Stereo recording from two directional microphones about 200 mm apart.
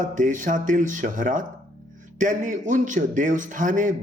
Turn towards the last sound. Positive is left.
turn(degrees=-40)  # may be behind; listen again after turning